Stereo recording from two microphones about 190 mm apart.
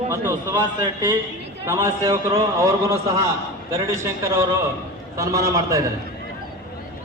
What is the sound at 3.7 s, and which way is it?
A man's voice, 15° right (ahead or behind).